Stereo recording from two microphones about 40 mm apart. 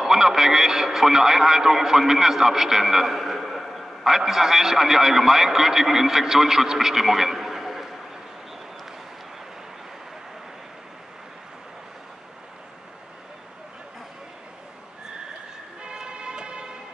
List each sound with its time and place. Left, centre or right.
0.0 s a man's voice: centre
15.8 s vehicle: right